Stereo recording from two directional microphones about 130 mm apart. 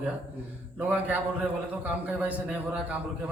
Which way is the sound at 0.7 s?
15° right (ahead or behind).